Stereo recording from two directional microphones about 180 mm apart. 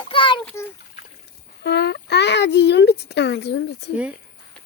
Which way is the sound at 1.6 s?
70° left (ahead or behind).